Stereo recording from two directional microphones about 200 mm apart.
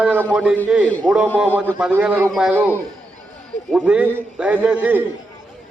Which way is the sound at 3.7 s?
5° right (ahead or behind).